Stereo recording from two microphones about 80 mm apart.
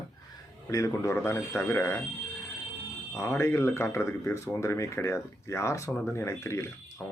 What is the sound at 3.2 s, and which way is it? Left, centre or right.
Speech, left.